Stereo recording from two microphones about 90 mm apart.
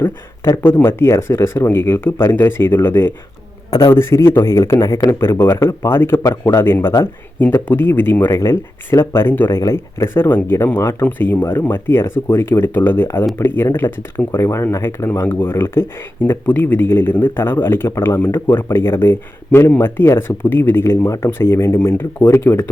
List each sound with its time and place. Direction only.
0.6 s speech: 25° left (ahead or behind)